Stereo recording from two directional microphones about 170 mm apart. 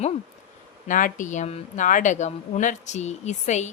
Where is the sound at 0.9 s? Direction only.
50° left (ahead or behind).